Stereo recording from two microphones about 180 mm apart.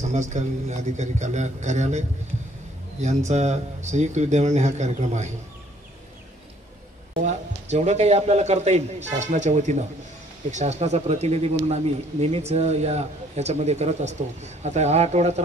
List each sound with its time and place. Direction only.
0.0 s speech: 40° right (ahead or behind)
3.3 s speech: 40° right (ahead or behind)
7.2 s speech: 40° right (ahead or behind)